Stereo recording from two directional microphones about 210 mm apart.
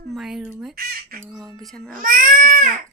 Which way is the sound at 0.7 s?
45° right (ahead or behind).